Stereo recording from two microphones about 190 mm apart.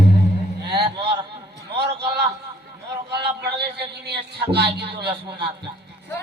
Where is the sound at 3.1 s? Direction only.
60° right (ahead or behind).